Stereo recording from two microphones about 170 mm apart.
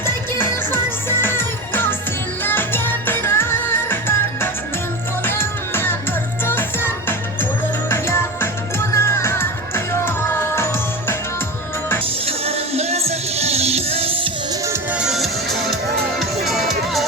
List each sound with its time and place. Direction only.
0.0 s music: 15° left (ahead or behind)
12.2 s music: 35° right (ahead or behind)
14.9 s music: 5° right (ahead or behind)